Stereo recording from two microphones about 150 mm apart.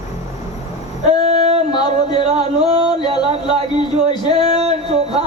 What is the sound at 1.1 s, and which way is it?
Singing, 45° right (ahead or behind).